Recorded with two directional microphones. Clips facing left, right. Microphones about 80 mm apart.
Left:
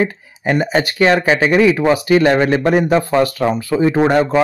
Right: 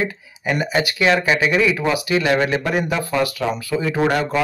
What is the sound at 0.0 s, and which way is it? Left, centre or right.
Speech, left.